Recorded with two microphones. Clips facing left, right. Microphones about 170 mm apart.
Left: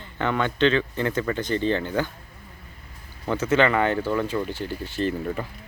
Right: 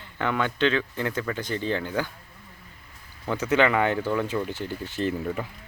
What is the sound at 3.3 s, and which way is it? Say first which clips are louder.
Speech: left 1 dB; 15° right (ahead or behind).